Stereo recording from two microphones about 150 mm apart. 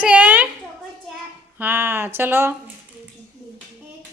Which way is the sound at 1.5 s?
15° right (ahead or behind).